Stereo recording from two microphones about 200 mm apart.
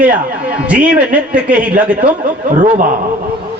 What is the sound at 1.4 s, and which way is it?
Speech, 5° right (ahead or behind).